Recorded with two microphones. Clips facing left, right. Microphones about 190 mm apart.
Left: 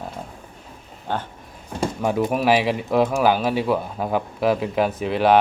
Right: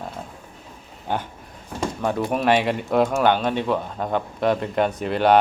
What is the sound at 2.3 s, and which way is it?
Speech, 5° left (ahead or behind).